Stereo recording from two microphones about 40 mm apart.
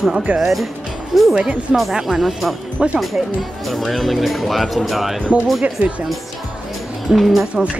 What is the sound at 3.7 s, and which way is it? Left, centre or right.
Speech, centre.